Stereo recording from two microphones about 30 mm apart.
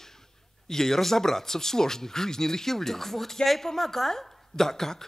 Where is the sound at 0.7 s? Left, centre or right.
Centre.